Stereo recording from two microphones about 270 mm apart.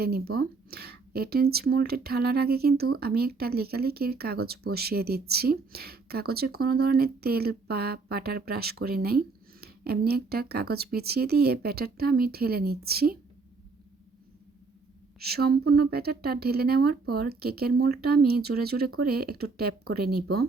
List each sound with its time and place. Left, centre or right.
0.0 s speech: right
15.2 s speech: right